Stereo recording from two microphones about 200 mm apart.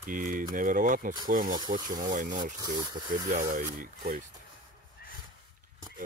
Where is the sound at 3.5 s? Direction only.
45° right (ahead or behind).